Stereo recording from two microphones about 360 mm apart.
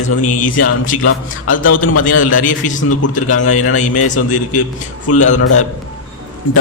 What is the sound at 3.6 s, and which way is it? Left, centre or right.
Speech, left.